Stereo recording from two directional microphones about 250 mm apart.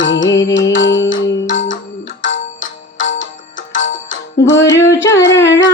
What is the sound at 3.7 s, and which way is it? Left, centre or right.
Music, left.